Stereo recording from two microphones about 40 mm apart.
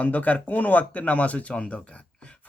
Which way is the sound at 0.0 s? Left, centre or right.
Left.